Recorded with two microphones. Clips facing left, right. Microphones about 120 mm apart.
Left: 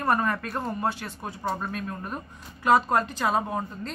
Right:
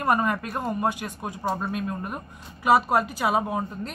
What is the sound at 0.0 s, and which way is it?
Speech, 15° right (ahead or behind).